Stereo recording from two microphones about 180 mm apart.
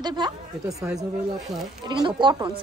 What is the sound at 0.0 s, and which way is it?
A woman's voice, 25° right (ahead or behind).